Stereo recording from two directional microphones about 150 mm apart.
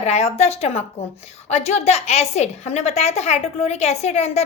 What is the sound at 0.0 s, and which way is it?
A woman's voice, 45° left (ahead or behind).